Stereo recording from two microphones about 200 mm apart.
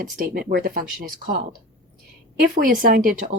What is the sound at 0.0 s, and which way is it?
Speech, 45° right (ahead or behind).